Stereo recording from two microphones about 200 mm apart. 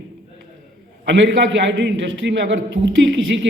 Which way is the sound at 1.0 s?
65° right (ahead or behind).